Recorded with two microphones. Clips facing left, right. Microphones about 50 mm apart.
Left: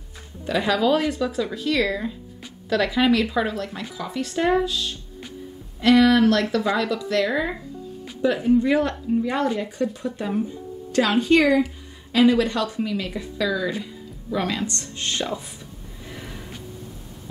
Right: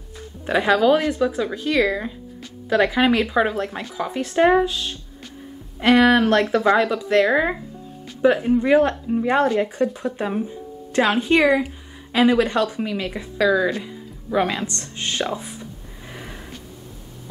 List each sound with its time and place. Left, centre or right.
0.5 s speech: right